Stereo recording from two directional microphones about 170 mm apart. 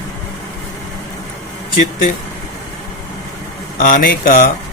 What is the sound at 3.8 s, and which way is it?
Speech, 50° left (ahead or behind).